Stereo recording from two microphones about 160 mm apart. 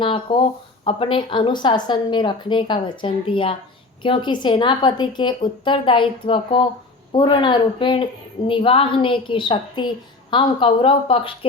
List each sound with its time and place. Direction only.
0.0 s a woman's voice: 30° left (ahead or behind)